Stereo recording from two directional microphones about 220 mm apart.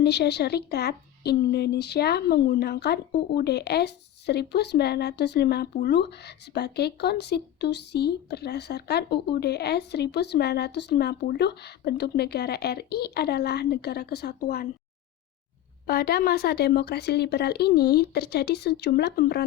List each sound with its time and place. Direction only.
0.0 s speech: 50° left (ahead or behind)
15.9 s speech: 45° left (ahead or behind)